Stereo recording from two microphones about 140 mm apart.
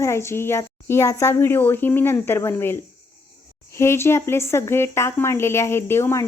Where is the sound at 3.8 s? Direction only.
20° left (ahead or behind).